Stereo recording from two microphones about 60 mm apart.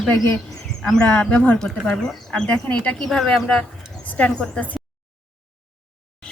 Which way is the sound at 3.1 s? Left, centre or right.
Centre.